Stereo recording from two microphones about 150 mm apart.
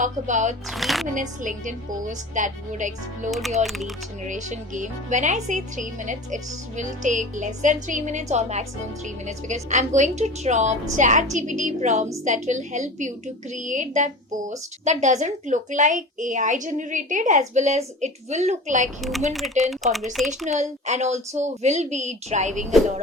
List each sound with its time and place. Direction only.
0.0 s a woman's voice: 55° right (ahead or behind)
0.7 s speech: centre (ahead or behind)
1.1 s a woman's voice: 60° right (ahead or behind)
3.2 s speech: centre (ahead or behind)
4.3 s a woman's voice: 55° right (ahead or behind)
19.3 s speech: centre (ahead or behind)
20.5 s a woman's voice: 50° right (ahead or behind)